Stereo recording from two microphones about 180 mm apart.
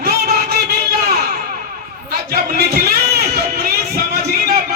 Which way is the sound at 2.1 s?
60° right (ahead or behind).